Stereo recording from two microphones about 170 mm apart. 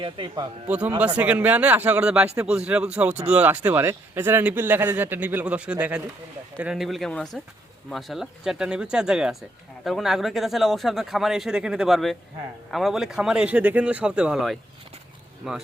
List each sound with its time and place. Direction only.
0.0 s speech: 30° right (ahead or behind)
0.7 s speech: 10° right (ahead or behind)